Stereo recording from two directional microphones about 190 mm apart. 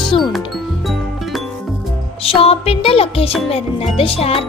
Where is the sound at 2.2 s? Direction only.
30° left (ahead or behind).